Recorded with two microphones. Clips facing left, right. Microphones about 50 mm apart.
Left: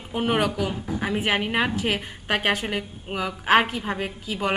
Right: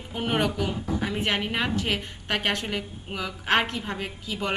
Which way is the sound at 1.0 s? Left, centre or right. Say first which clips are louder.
Left 5 dB; centre.